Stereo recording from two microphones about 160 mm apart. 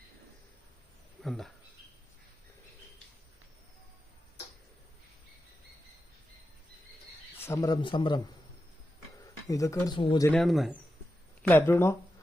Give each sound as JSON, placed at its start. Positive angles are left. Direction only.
{"t": 1.2, "sound": "speech", "side_deg": 0}
{"t": 7.3, "sound": "a man's voice", "side_deg": 15}
{"t": 9.5, "sound": "a man's voice", "side_deg": 20}
{"t": 10.3, "sound": "speech", "side_deg": 0}
{"t": 11.4, "sound": "speech", "side_deg": 15}